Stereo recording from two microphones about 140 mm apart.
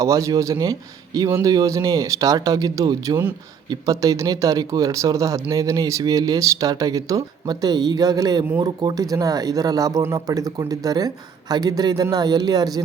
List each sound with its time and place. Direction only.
0.0 s speech: 20° right (ahead or behind)